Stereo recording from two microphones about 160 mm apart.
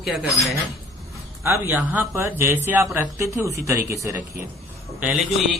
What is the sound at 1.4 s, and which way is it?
A man's voice, 15° right (ahead or behind).